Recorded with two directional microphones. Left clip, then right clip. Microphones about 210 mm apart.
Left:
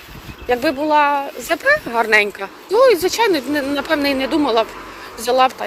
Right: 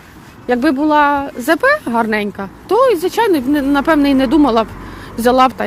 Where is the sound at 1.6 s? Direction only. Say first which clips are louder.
Left 2 dB; 20° right (ahead or behind).